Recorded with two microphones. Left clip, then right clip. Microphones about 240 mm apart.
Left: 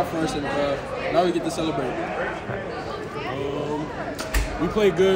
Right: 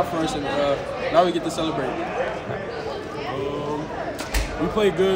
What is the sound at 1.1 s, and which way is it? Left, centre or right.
Speech, centre.